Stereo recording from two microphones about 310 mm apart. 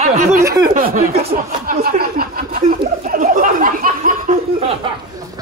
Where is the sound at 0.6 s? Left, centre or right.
Right.